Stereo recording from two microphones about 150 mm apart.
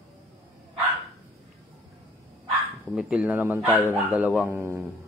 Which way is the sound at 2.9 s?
5° right (ahead or behind).